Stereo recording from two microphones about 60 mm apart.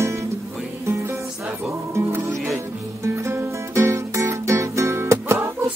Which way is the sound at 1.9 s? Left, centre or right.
Right.